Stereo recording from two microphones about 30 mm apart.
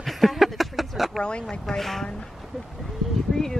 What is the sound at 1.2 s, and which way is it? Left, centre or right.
Speech, left.